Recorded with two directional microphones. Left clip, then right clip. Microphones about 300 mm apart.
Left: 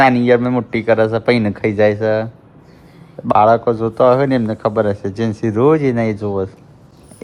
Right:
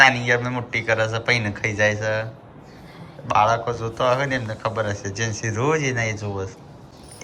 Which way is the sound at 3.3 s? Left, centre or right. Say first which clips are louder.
Left 7 dB; left.